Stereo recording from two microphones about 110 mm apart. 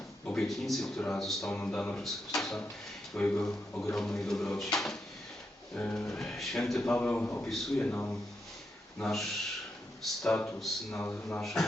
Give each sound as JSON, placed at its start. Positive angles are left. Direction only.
{"t": 0.3, "sound": "speech", "side_deg": 5}
{"t": 5.7, "sound": "speech", "side_deg": 15}
{"t": 6.1, "sound": "speech", "side_deg": 5}
{"t": 7.4, "sound": "speech", "side_deg": 0}
{"t": 7.8, "sound": "speech", "side_deg": 15}
{"t": 11.0, "sound": "speech", "side_deg": 20}
{"t": 11.3, "sound": "speech", "side_deg": 5}